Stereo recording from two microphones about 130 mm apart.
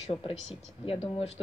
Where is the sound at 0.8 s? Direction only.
50° left (ahead or behind).